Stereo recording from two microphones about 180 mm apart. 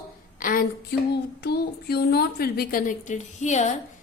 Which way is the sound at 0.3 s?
50° left (ahead or behind).